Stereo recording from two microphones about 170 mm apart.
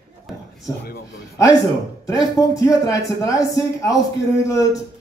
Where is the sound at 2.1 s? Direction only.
20° left (ahead or behind).